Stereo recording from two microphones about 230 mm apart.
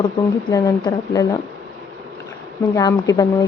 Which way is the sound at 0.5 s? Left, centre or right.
Centre.